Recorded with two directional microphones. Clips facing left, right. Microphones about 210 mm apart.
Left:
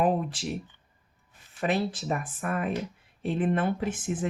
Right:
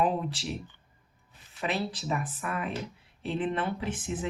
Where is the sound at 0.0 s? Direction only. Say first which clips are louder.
Left 2 dB; 50° left (ahead or behind).